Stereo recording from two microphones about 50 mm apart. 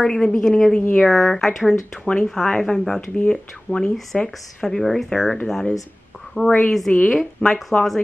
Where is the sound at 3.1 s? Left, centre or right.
Left.